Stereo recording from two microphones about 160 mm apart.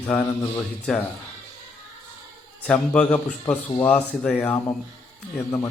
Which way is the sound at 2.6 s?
10° left (ahead or behind).